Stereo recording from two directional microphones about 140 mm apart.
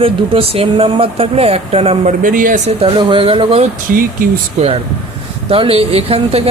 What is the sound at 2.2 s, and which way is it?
Speech, 75° right (ahead or behind).